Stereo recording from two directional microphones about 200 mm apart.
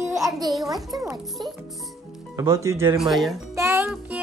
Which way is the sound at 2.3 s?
15° right (ahead or behind).